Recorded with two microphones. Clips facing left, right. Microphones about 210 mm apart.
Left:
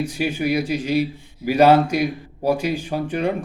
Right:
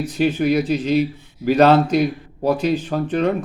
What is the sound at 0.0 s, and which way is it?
A man's voice, 10° left (ahead or behind).